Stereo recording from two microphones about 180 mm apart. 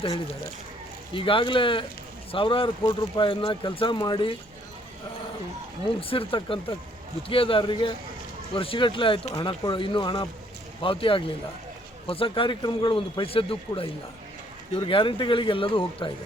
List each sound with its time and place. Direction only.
1.1 s speech: 30° left (ahead or behind)
6.0 s speech: 30° left (ahead or behind)